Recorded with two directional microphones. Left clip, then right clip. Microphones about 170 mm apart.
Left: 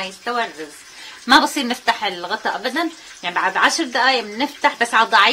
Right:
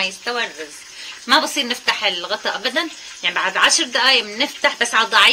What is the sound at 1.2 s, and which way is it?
Speech, 45° left (ahead or behind).